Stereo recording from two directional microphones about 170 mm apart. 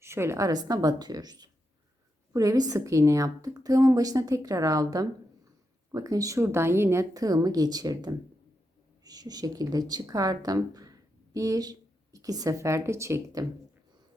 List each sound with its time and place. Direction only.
0.0 s a woman's voice: 15° right (ahead or behind)